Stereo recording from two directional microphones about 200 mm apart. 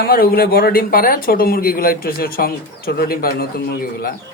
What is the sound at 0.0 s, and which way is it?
Speech, 50° left (ahead or behind).